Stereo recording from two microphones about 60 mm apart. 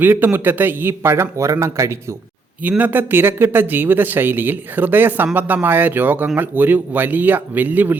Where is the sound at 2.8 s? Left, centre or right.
Right.